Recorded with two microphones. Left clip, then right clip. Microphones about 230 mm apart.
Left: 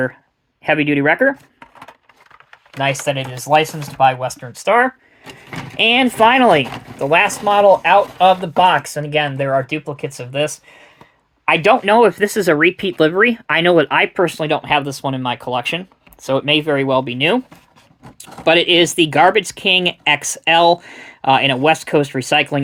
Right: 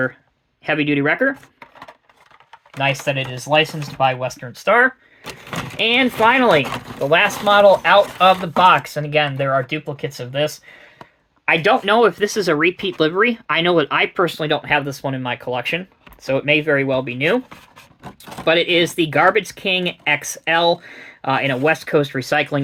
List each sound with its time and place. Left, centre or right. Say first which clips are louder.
0.6 s speech: left 3 dB; left
2.9 s speech: left 1 dB; left
11.5 s speech: left 3 dB; left
18.4 s speech: left 3 dB; left